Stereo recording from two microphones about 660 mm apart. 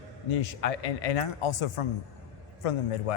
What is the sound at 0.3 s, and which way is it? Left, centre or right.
A man's voice, left.